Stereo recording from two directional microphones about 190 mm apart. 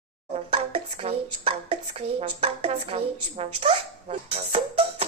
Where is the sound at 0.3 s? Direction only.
30° right (ahead or behind).